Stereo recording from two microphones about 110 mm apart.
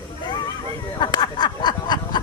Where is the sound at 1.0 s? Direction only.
40° left (ahead or behind).